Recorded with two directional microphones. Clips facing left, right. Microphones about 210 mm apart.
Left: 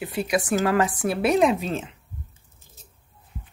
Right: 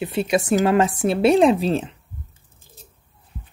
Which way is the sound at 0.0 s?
25° right (ahead or behind).